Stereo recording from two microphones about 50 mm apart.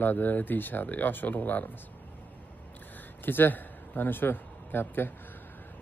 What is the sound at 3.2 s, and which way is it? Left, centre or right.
A man's voice, left.